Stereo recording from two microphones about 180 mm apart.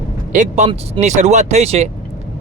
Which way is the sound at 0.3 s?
40° right (ahead or behind).